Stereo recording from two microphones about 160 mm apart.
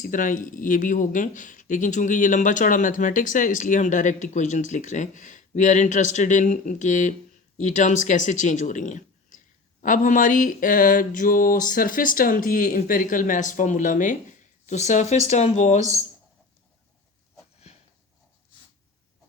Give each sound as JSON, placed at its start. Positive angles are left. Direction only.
{"t": 0.0, "sound": "speech", "side_deg": 55}
{"t": 9.8, "sound": "a sound", "side_deg": 55}
{"t": 14.7, "sound": "speech", "side_deg": 45}